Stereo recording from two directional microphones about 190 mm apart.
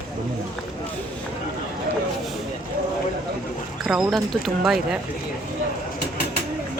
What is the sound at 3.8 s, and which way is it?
Speech, 5° right (ahead or behind).